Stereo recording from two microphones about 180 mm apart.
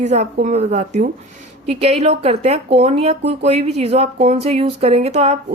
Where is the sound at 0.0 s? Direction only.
40° right (ahead or behind).